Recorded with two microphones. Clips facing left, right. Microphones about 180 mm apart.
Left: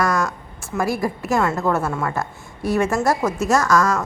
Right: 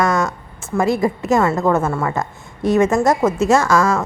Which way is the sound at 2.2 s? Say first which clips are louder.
Right 5 dB; 20° right (ahead or behind).